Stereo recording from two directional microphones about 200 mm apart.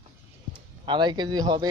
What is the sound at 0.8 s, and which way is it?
Speech, 25° right (ahead or behind).